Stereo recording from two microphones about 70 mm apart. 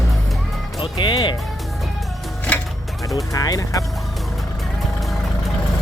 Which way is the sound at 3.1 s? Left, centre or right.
Left.